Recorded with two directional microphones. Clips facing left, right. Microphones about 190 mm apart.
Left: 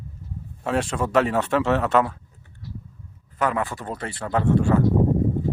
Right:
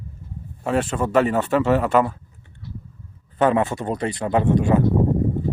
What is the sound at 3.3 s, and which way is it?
Speech, 25° right (ahead or behind).